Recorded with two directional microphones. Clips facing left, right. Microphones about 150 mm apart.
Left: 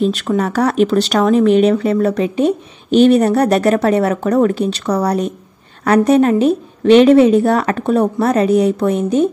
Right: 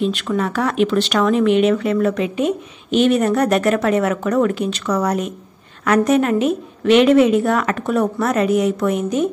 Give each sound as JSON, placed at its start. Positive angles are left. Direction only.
{"t": 0.0, "sound": "speech", "side_deg": 40}